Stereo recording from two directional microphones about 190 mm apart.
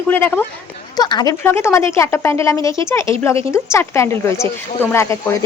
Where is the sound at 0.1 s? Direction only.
10° left (ahead or behind).